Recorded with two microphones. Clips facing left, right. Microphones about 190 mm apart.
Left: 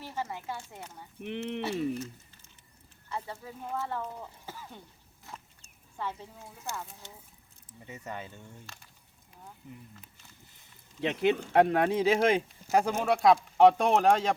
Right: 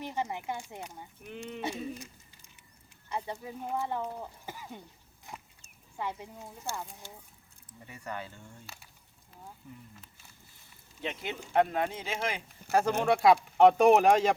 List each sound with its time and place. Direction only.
0.0 s speech: 20° right (ahead or behind)
1.2 s speech: 70° left (ahead or behind)
1.6 s speech: 15° right (ahead or behind)
5.2 s a sound: 15° right (ahead or behind)
6.7 s speech: 20° left (ahead or behind)
8.6 s a sound: 5° right (ahead or behind)
9.6 s speech: 20° left (ahead or behind)
11.0 s speech: 70° left (ahead or behind)
12.7 s speech: 55° right (ahead or behind)
13.1 s speech: centre (ahead or behind)